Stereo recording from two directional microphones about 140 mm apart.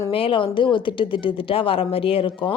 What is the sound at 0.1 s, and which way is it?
Speech, 40° left (ahead or behind).